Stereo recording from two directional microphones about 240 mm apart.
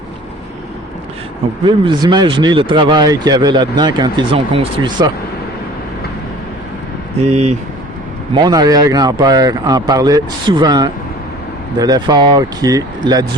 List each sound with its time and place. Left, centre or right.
1.6 s speech: centre
7.2 s speech: right
8.3 s speech: centre